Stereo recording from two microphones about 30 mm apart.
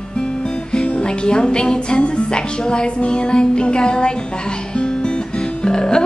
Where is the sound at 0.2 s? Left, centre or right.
Left.